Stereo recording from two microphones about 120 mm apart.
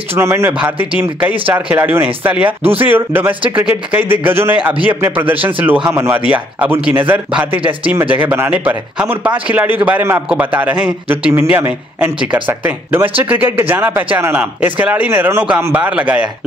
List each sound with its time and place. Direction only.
0.1 s speech: 20° right (ahead or behind)